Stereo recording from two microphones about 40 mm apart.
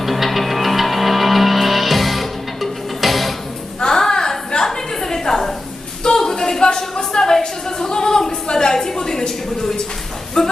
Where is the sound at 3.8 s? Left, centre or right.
Centre.